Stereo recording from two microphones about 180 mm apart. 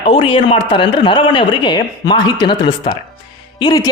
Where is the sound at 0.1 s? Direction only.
30° left (ahead or behind).